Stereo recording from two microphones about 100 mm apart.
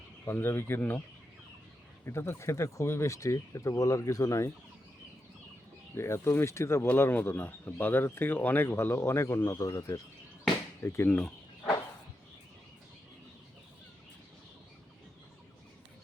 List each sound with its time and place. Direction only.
0.3 s speech: 20° left (ahead or behind)
2.0 s speech: 25° left (ahead or behind)
5.9 s speech: 25° left (ahead or behind)
10.8 s speech: 20° left (ahead or behind)
11.2 s a sound: 10° left (ahead or behind)